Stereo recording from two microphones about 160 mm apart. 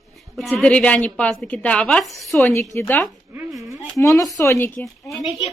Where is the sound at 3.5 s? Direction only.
Centre (ahead or behind).